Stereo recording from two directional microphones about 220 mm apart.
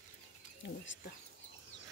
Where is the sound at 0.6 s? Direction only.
55° left (ahead or behind).